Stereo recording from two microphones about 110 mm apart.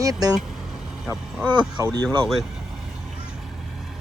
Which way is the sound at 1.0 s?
5° right (ahead or behind).